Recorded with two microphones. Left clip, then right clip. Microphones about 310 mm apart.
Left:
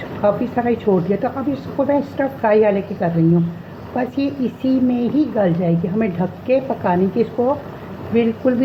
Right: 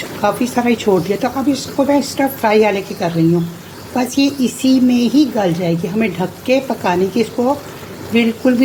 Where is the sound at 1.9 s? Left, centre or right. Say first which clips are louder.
Right 3 dB; right.